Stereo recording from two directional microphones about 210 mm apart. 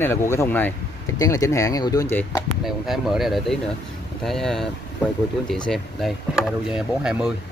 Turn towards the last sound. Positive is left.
turn(degrees=-5)  # may be behind; listen again after turning